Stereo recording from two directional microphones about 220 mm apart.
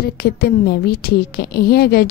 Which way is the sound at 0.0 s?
45° left (ahead or behind).